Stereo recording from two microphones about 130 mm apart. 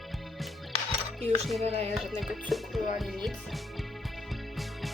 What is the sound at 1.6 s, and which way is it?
Speech, 55° right (ahead or behind).